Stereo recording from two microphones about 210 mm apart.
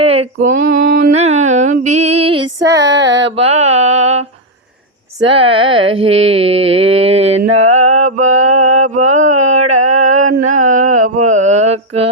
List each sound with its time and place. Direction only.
0.0 s female singing: 30° right (ahead or behind)
2.6 s female singing: 55° right (ahead or behind)
3.3 s mantra: 30° right (ahead or behind)
5.4 s a sound: 25° right (ahead or behind)